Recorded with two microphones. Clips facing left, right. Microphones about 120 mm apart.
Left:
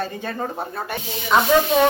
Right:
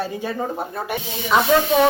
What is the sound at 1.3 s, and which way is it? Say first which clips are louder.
Speech: even; centre (ahead or behind).